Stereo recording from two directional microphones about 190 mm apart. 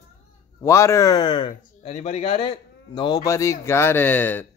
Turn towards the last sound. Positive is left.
turn(degrees=10)  # may be behind; listen again after turning